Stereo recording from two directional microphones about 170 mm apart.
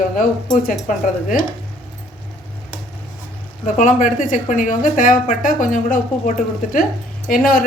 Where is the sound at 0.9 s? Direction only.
50° left (ahead or behind).